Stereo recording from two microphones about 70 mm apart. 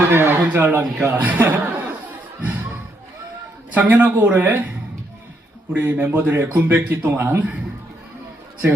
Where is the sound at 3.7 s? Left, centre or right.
Right.